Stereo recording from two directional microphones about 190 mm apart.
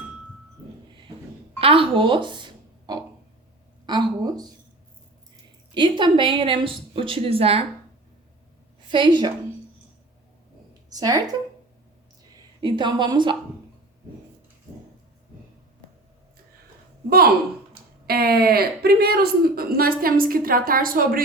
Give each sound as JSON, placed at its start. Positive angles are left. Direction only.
{"t": 1.5, "sound": "a sound", "side_deg": -30}
{"t": 3.8, "sound": "a woman's voice", "side_deg": -20}
{"t": 5.7, "sound": "a woman's voice", "side_deg": -25}
{"t": 8.9, "sound": "a woman's voice", "side_deg": -25}
{"t": 10.8, "sound": "speech", "side_deg": -20}
{"t": 12.6, "sound": "a woman's voice", "side_deg": -25}
{"t": 18.0, "sound": "a woman's voice", "side_deg": -55}